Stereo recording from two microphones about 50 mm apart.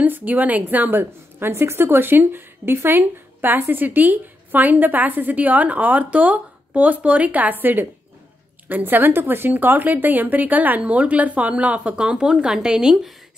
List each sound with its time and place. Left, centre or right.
0.0 s a woman's voice: right; by 12.9 s centre